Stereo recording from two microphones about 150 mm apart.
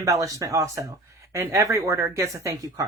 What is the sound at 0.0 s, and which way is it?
Speech, 20° right (ahead or behind).